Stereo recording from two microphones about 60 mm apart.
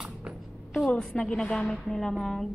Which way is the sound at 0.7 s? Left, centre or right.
Centre.